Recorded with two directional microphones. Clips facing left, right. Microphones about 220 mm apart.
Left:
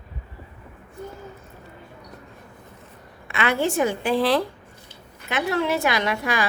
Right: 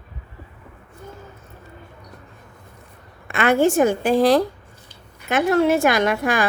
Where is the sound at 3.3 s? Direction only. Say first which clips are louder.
Right 6 dB; 45° right (ahead or behind).